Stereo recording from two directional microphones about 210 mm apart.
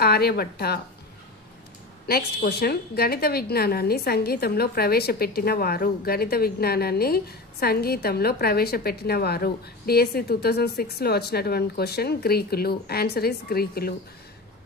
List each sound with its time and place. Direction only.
0.0 s a woman's voice: 50° left (ahead or behind)
2.0 s a woman's voice: 45° left (ahead or behind)